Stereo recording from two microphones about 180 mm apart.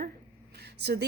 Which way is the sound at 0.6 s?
65° right (ahead or behind).